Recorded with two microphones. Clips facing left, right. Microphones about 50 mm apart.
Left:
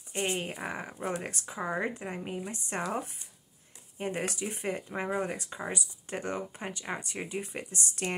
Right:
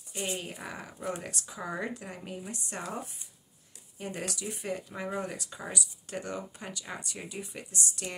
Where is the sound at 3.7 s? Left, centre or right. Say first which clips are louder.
Left 4 dB; left.